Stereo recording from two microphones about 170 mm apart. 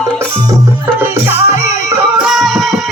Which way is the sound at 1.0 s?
15° right (ahead or behind).